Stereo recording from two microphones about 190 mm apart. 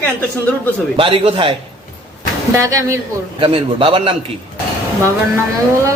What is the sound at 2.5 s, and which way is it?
Speech, 15° right (ahead or behind).